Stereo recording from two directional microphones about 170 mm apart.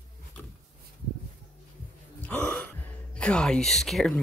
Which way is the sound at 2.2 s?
10° left (ahead or behind).